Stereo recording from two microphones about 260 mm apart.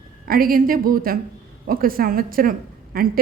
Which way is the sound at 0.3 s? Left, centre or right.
Right.